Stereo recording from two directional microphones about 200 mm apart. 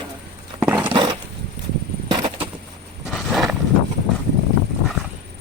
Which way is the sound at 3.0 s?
Centre (ahead or behind).